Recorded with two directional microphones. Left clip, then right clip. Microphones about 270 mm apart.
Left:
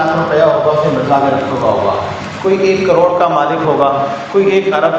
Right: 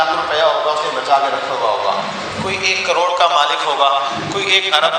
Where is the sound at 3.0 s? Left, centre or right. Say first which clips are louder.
Left 3 dB; right.